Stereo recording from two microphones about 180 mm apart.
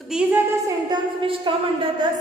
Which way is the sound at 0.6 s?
25° right (ahead or behind).